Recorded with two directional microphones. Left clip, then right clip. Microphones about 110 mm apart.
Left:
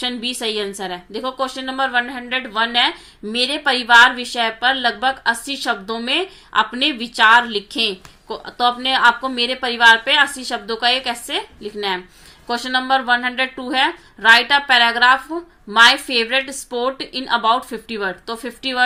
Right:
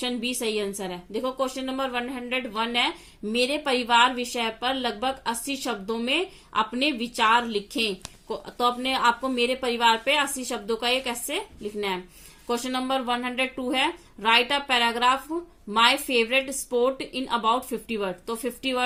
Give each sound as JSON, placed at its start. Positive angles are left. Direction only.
{"t": 0.0, "sound": "a woman's voice", "side_deg": -40}